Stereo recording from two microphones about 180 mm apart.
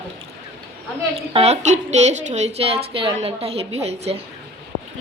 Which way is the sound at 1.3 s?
35° right (ahead or behind).